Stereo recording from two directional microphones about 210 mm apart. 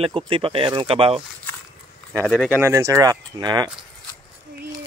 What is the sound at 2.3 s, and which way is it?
Speech, 5° right (ahead or behind).